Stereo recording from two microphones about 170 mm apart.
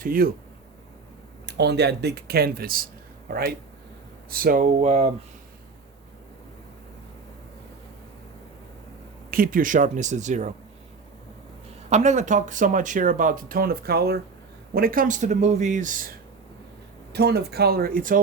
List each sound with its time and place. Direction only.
0.0 s speech: 60° right (ahead or behind)
1.5 s speech: 80° right; by 4.6 s 55° right (ahead or behind)
4.8 s speech: 40° right (ahead or behind)
9.3 s speech: 55° right (ahead or behind)
11.9 s speech: 45° right (ahead or behind)
17.1 s speech: 75° right (ahead or behind); by 18.2 s 55° right (ahead or behind)